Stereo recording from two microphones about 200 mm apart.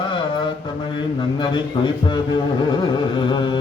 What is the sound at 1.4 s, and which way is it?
A man's voice, 20° left (ahead or behind).